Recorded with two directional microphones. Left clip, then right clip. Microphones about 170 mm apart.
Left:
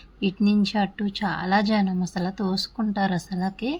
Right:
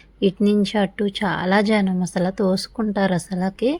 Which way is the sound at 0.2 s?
30° right (ahead or behind).